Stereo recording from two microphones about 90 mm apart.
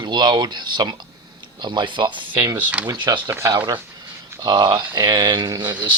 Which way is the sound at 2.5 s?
20° right (ahead or behind).